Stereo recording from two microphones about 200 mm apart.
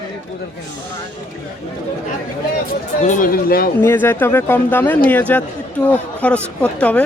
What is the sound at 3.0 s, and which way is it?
Speech, 40° left (ahead or behind).